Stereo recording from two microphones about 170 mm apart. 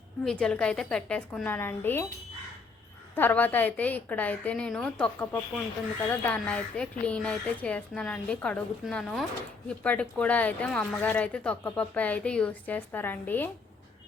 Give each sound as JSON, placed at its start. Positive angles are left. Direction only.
{"t": 0.3, "sound": "speech", "side_deg": 5}
{"t": 3.2, "sound": "speech", "side_deg": 10}